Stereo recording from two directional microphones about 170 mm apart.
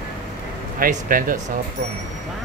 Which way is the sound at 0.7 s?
55° right (ahead or behind).